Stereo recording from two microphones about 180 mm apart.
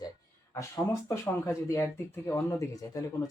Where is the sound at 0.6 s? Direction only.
15° left (ahead or behind).